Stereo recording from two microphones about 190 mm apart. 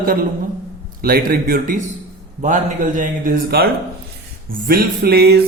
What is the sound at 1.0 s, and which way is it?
A man's voice, 50° right (ahead or behind).